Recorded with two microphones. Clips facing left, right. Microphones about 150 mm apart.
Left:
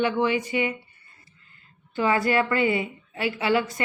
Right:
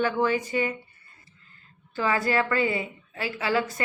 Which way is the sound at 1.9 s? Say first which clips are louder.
Left 3 dB; 25° left (ahead or behind).